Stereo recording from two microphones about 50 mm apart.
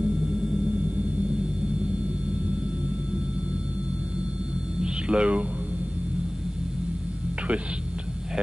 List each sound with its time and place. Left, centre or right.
4.8 s hum: right